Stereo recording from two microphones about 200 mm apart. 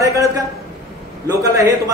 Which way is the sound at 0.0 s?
15° right (ahead or behind).